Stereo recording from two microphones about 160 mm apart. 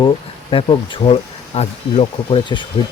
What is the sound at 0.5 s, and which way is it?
Speech, 30° left (ahead or behind).